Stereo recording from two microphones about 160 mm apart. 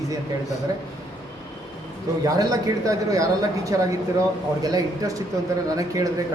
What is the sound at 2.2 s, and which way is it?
Speech, 20° right (ahead or behind).